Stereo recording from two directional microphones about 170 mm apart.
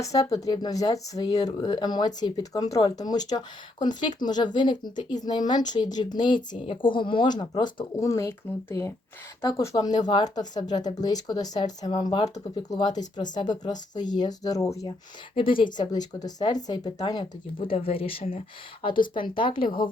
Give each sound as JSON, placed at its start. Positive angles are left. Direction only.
{"t": 0.0, "sound": "speech", "side_deg": 20}
{"t": 15.4, "sound": "speech", "side_deg": 30}